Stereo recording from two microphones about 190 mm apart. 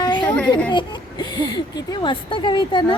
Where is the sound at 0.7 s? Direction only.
25° left (ahead or behind).